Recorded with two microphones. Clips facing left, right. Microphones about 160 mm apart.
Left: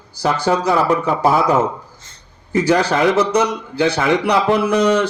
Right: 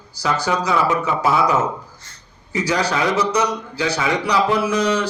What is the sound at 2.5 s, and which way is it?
A man's voice, 55° left (ahead or behind).